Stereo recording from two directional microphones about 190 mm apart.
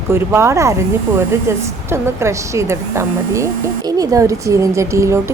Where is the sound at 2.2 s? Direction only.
15° right (ahead or behind).